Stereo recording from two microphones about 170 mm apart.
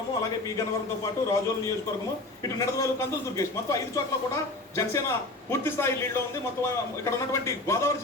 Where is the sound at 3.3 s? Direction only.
20° left (ahead or behind).